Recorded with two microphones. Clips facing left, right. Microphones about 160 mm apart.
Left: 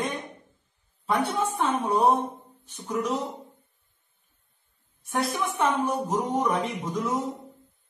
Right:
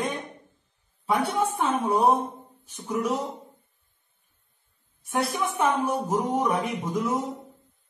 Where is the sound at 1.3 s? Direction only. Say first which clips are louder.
Right 1 dB; 10° right (ahead or behind).